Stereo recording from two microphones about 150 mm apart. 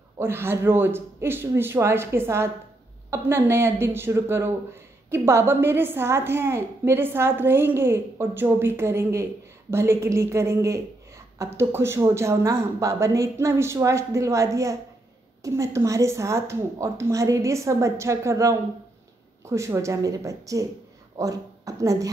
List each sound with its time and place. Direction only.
0.2 s a woman's voice: 15° right (ahead or behind)